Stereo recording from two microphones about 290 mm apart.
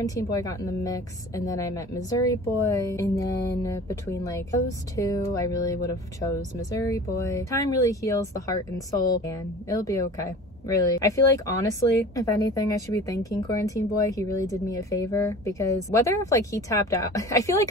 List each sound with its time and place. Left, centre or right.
0.0 s a woman's voice: centre
9.7 s a woman's voice: centre